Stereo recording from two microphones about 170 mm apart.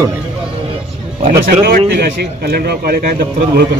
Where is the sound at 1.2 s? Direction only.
50° right (ahead or behind); by 3.0 s 65° right (ahead or behind).